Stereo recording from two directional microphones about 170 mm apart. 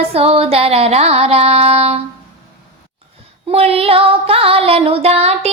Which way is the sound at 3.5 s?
35° right (ahead or behind).